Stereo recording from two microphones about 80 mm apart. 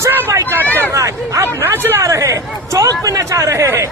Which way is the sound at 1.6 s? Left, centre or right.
Right.